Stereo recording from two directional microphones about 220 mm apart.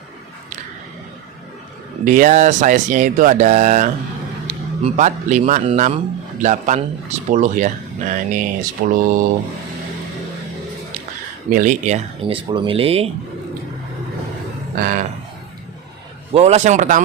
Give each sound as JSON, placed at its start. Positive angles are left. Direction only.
{"t": 2.0, "sound": "a man's voice", "side_deg": -35}
{"t": 11.4, "sound": "speech", "side_deg": -35}
{"t": 14.8, "sound": "speech", "side_deg": -40}
{"t": 16.3, "sound": "speech", "side_deg": -30}